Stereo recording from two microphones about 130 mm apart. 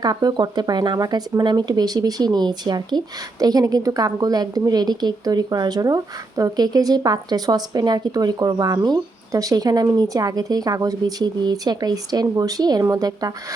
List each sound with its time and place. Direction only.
0.0 s a woman's voice: 30° right (ahead or behind)